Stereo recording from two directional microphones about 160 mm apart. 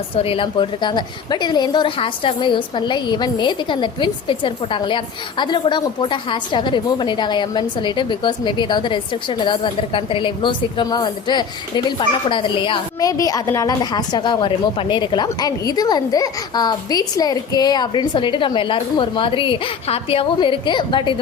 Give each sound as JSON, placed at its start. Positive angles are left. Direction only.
{"t": 0.2, "sound": "a woman's voice", "side_deg": 35}